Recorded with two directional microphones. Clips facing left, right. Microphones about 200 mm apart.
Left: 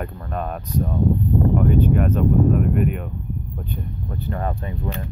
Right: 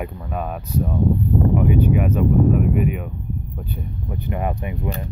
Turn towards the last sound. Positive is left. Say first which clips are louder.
# right 2 dB
turn(degrees=-20)  # may be behind; listen again after turning